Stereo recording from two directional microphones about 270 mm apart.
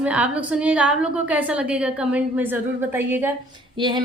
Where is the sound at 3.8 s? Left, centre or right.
Centre.